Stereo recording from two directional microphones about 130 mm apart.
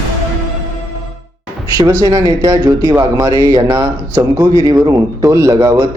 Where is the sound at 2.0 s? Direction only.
30° right (ahead or behind).